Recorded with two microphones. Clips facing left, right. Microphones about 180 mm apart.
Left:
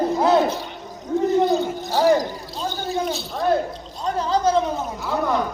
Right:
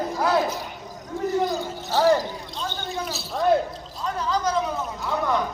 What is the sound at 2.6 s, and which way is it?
Speech, 35° left (ahead or behind).